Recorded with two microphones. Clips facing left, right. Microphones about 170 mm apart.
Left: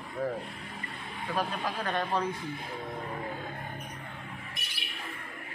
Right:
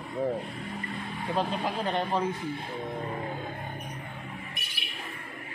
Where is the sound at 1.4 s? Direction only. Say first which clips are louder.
Right 3 dB; 25° right (ahead or behind).